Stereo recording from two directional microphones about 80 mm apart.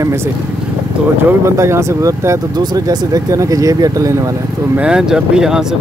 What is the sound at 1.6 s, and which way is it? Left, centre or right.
Speech, right.